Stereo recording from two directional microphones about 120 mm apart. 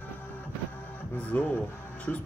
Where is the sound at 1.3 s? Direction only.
10° left (ahead or behind).